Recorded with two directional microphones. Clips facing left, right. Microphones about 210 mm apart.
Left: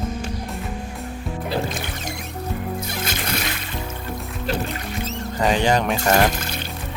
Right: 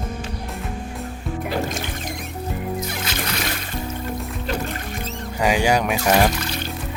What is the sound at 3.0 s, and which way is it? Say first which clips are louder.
Music: even; 50° left (ahead or behind).